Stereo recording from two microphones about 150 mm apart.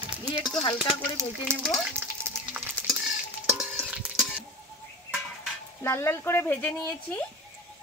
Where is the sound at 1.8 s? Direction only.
10° right (ahead or behind).